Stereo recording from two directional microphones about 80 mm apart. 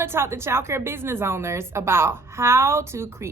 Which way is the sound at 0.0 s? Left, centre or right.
Right.